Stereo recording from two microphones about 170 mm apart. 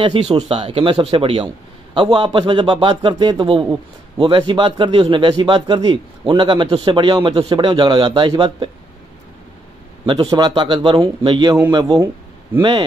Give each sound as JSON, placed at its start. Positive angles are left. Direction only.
{"t": 0.0, "sound": "a man's voice", "side_deg": -30}
{"t": 10.3, "sound": "a man's voice", "side_deg": -25}